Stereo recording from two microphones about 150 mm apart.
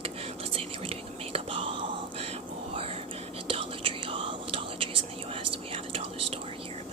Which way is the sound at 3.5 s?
35° right (ahead or behind).